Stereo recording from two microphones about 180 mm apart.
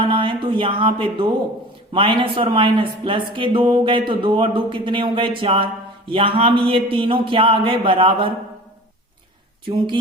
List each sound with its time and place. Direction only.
0.0 s speech: 25° right (ahead or behind)
9.6 s speech: 25° right (ahead or behind)